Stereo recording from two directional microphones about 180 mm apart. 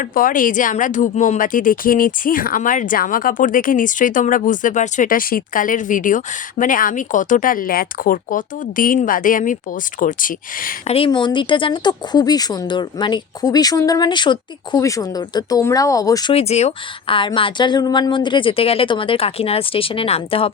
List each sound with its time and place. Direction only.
0.0 s speech: 50° left (ahead or behind)
10.8 s speech: 30° left (ahead or behind)
16.3 s a woman's voice: 35° left (ahead or behind)